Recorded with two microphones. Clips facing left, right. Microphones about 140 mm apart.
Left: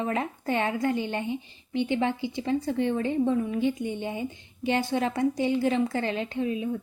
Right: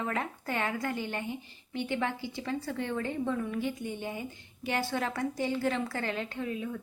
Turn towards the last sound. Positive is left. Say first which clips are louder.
# left 6 dB
turn(degrees=20)  # may be behind; listen again after turning